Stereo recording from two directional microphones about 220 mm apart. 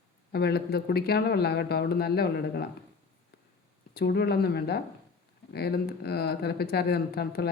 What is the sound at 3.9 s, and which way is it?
Speech, 45° left (ahead or behind).